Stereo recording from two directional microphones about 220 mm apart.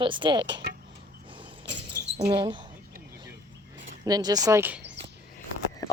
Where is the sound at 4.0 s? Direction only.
20° right (ahead or behind).